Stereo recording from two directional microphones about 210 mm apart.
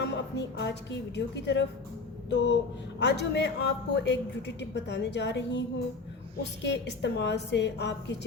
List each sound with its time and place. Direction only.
0.0 s a woman's voice: 55° left (ahead or behind)